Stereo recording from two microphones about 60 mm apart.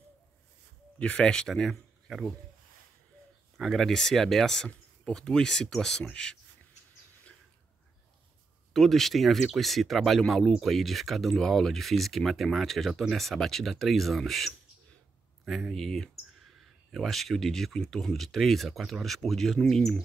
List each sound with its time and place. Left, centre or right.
0.9 s speech: left
1.5 s speech: centre
3.5 s speech: centre
8.7 s speech: centre